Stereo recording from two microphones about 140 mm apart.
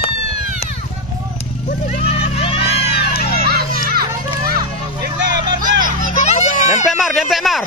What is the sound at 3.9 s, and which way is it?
Children playing, 90° right.